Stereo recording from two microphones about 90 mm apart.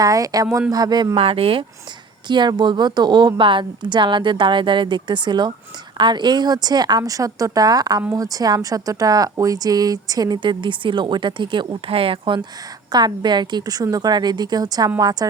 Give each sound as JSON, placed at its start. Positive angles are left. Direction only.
{"t": 0.0, "sound": "a woman's voice", "side_deg": -40}
{"t": 1.1, "sound": "speech", "side_deg": -90}
{"t": 2.2, "sound": "a woman's voice", "side_deg": -60}
{"t": 12.9, "sound": "a woman's voice", "side_deg": -50}